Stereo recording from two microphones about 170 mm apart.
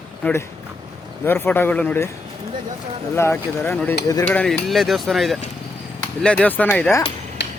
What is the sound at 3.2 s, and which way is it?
Speech, 15° left (ahead or behind).